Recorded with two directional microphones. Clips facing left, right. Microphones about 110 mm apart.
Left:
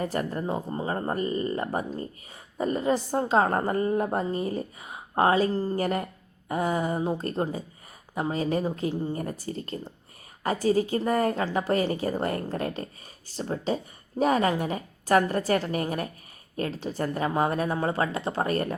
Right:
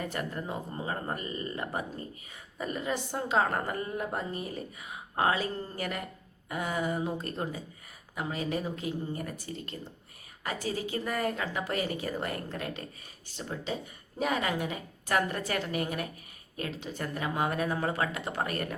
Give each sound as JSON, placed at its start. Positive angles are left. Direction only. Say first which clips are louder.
{"t": 0.0, "sound": "a woman's voice", "louder": "left 6 dB", "side_deg": 35}